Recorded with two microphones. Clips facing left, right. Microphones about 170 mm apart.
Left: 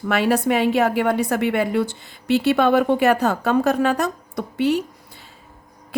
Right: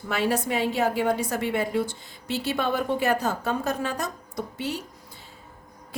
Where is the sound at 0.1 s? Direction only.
70° left (ahead or behind).